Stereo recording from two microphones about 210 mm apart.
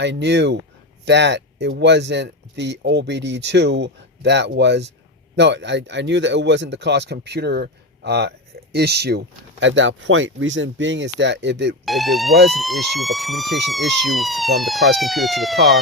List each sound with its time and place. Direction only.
0.0 s speech: 55° right (ahead or behind)
11.9 s speech: centre (ahead or behind)